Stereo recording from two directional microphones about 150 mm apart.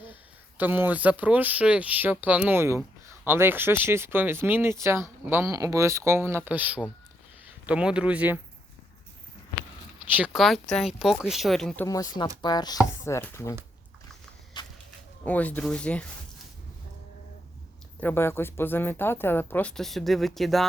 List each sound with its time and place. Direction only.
0.5 s speech: 10° right (ahead or behind)
10.1 s speech: 10° right (ahead or behind)
11.9 s speech: 25° left (ahead or behind)
14.5 s a sound: 30° left (ahead or behind)
15.2 s speech: 10° left (ahead or behind)
18.0 s speech: 15° left (ahead or behind)